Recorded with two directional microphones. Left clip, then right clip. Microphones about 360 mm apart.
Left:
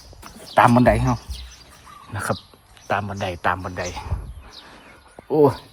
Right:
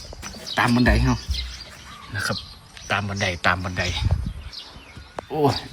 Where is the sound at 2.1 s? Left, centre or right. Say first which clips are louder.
Left 1 dB; centre.